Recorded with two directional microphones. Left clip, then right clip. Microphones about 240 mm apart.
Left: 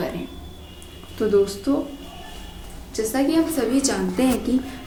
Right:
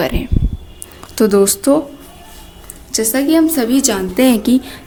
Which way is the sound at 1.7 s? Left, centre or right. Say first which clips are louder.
Right 11 dB; right.